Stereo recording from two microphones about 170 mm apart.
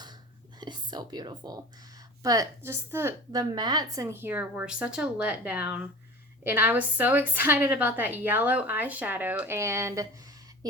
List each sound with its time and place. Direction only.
0.6 s a woman's voice: 25° right (ahead or behind)
3.5 s a woman's voice: 25° right (ahead or behind)